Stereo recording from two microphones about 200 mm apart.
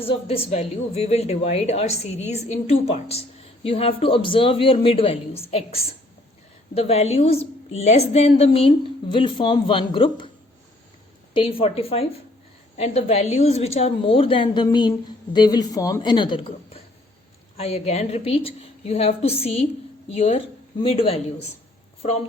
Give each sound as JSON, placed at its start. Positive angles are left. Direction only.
{"t": 0.0, "sound": "a woman's voice", "side_deg": 30}
{"t": 11.3, "sound": "a woman's voice", "side_deg": 25}